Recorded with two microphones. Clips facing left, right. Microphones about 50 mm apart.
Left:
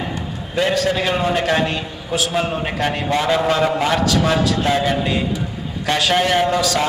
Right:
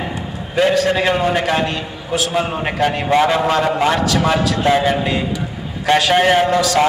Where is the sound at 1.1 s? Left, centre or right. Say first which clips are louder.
Right 1 dB; centre.